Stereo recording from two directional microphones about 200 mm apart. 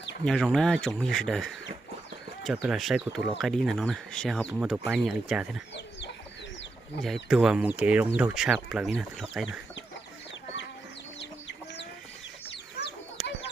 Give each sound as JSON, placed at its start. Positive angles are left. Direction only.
{"t": 0.3, "sound": "speech", "side_deg": 0}
{"t": 7.0, "sound": "speech", "side_deg": 0}
{"t": 11.2, "sound": "chicken", "side_deg": 60}